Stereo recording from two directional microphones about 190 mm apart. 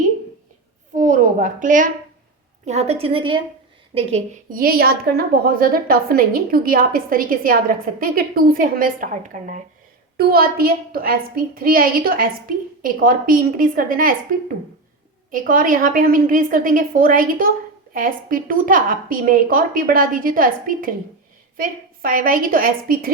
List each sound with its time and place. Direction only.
0.9 s a sound: 40° right (ahead or behind)
2.6 s a woman's voice: 35° right (ahead or behind)
4.4 s a woman's voice: 50° right (ahead or behind)